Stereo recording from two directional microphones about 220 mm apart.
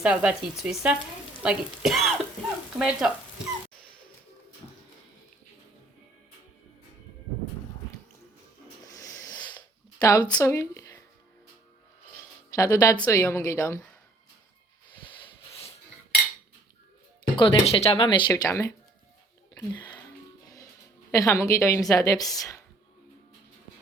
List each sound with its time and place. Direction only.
0.0 s speech: 5° right (ahead or behind)
8.9 s rub: 15° left (ahead or behind)
9.6 s a sound: 15° left (ahead or behind)
12.5 s a woman's voice: 15° left (ahead or behind)
17.3 s speech: 25° left (ahead or behind)
19.5 s a sound: 10° left (ahead or behind)
21.1 s a woman's voice: 15° left (ahead or behind)